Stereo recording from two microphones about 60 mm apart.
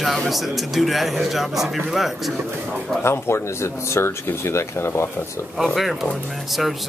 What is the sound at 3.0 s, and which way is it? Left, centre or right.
Speech, left.